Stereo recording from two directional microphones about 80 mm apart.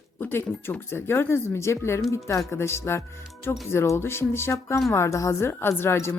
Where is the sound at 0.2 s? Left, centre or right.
Left.